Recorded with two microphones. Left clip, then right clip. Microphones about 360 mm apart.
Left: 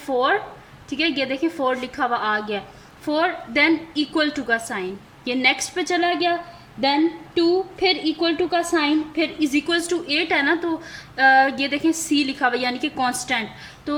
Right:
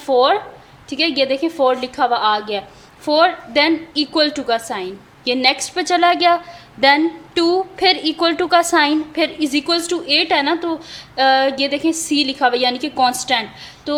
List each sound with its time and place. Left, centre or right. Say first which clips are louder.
0.1 s a woman's voice: right 7 dB; right
0.9 s a woman's voice: right 5 dB; centre